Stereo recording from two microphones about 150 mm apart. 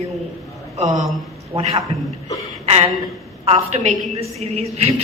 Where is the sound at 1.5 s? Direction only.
40° right (ahead or behind).